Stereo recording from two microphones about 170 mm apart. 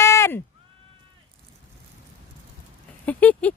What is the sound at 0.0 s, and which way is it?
Bleat, 15° left (ahead or behind).